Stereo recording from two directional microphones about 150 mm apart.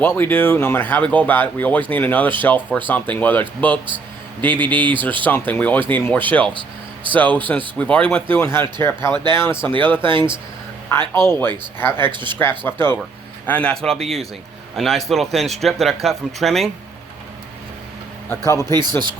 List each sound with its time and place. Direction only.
0.0 s speech: 15° left (ahead or behind)
4.8 s speech: 30° right (ahead or behind)
5.2 s speech: 10° left (ahead or behind)
6.5 s vehicle: 35° right (ahead or behind)
7.1 s speech: 10° left (ahead or behind)
8.4 s speech: 15° left (ahead or behind)
9.7 s speech: 35° right (ahead or behind)
10.9 s speech: 15° left (ahead or behind)
12.1 s speech: 30° right (ahead or behind)
12.4 s speech: 15° left (ahead or behind)
18.3 s speech: 20° left (ahead or behind)
18.7 s speech: 30° right (ahead or behind)